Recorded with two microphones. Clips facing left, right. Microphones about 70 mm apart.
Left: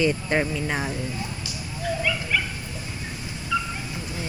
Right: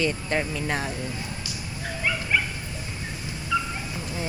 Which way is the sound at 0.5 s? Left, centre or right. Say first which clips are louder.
Left 1 dB; centre.